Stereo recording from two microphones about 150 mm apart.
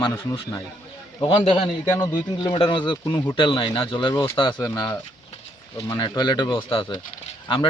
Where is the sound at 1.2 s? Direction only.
35° left (ahead or behind).